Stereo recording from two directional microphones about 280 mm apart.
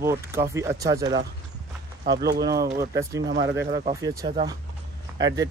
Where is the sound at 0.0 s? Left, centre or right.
Centre.